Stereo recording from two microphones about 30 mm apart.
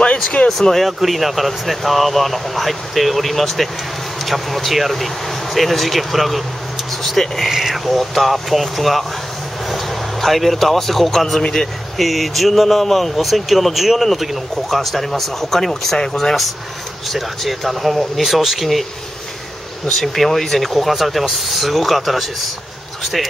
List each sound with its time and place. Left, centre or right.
0.0 s a sound: left
0.5 s speech: centre
0.8 s speech: centre
10.2 s speech: centre
12.0 s speech: centre
17.1 s speech: centre
19.9 s speech: centre